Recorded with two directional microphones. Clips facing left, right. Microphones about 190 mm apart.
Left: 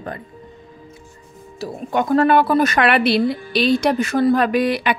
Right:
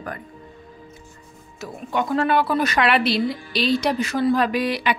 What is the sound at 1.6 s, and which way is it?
Speech, 45° left (ahead or behind).